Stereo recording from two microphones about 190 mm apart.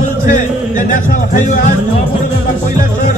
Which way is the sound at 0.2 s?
40° left (ahead or behind).